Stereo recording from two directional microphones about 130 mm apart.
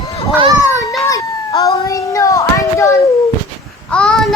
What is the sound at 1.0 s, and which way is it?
Cat, 25° left (ahead or behind).